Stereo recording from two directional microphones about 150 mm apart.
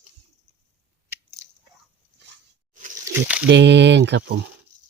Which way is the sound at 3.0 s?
10° right (ahead or behind).